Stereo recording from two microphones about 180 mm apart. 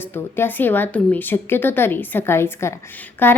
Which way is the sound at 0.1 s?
10° left (ahead or behind).